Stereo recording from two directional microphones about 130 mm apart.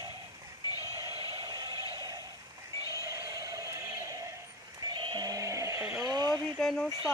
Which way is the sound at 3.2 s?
25° right (ahead or behind).